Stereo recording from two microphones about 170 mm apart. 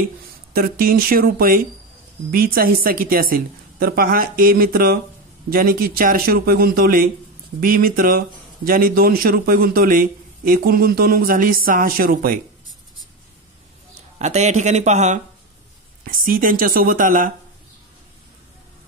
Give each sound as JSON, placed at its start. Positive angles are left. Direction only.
{"t": 0.5, "sound": "a man's voice", "side_deg": -60}
{"t": 14.1, "sound": "speech", "side_deg": -40}
{"t": 16.0, "sound": "speech", "side_deg": -55}